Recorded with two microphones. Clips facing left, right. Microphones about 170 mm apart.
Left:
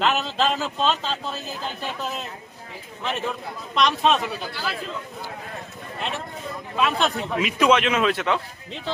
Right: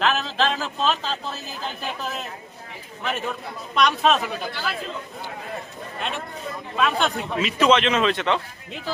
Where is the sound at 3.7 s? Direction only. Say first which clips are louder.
Right 1 dB; centre (ahead or behind).